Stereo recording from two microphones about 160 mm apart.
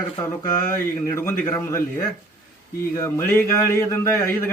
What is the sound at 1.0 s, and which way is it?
A man's voice, 15° left (ahead or behind).